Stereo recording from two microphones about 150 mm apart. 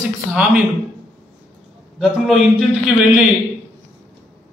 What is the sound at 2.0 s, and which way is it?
Speech, 5° right (ahead or behind).